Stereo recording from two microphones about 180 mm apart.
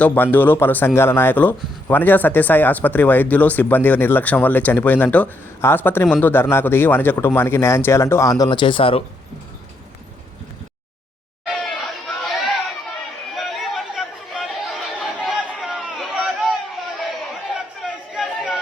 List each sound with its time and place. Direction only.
0.0 s a man's voice: 10° left (ahead or behind); by 9.0 s 30° left (ahead or behind)
11.4 s chatter: centre (ahead or behind)